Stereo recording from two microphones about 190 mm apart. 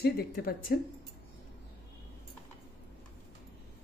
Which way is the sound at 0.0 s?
55° left (ahead or behind).